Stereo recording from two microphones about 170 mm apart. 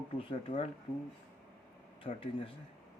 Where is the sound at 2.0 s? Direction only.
30° left (ahead or behind).